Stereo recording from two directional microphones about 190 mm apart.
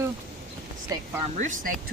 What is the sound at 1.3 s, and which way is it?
Speech, 40° right (ahead or behind).